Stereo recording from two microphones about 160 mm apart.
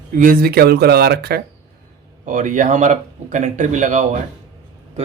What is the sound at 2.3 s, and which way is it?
Speech, 50° right (ahead or behind).